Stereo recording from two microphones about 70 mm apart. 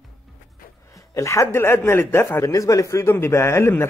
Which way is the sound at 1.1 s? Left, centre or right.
Left.